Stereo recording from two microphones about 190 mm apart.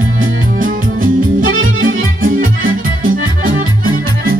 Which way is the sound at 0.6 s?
45° right (ahead or behind).